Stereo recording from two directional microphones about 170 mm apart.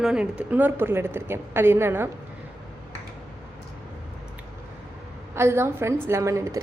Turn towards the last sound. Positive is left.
turn(degrees=-15)  # may be behind; listen again after turning